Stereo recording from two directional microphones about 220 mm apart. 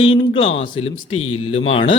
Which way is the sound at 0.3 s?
25° left (ahead or behind).